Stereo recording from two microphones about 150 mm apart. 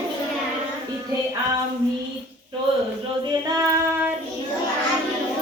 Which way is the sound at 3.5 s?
20° right (ahead or behind).